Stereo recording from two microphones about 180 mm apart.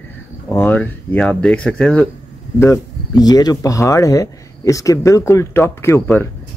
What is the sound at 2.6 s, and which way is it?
Speech, 20° left (ahead or behind).